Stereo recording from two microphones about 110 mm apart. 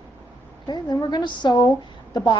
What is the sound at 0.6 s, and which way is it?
A woman's voice, 40° left (ahead or behind).